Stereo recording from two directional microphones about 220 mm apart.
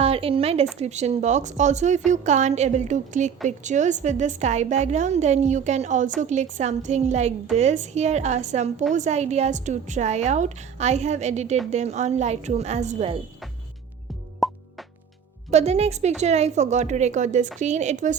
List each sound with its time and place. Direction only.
0.0 s a woman's voice: 25° right (ahead or behind)
14.4 s music: centre (ahead or behind)
15.4 s a woman's voice: 30° right (ahead or behind)